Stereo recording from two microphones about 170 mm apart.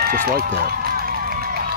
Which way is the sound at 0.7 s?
65° right (ahead or behind).